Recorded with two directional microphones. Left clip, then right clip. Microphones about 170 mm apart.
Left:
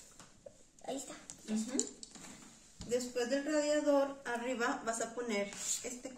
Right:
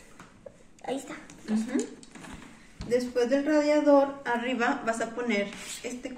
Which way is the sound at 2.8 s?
25° left (ahead or behind).